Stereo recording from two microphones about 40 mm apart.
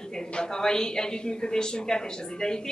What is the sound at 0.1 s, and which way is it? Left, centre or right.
A woman's voice, centre.